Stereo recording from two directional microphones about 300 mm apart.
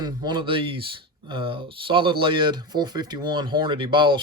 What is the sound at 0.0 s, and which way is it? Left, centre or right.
Speech, centre.